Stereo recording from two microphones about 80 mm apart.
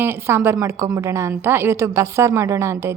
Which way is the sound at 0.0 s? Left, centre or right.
Right.